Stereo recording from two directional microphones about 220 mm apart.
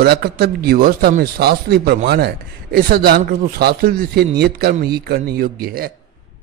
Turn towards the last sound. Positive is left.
turn(degrees=-45)  # may be behind; listen again after turning